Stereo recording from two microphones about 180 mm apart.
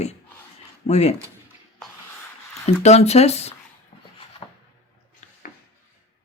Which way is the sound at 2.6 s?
40° left (ahead or behind).